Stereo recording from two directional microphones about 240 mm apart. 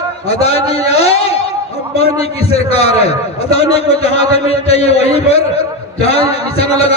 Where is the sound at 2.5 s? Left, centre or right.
Left.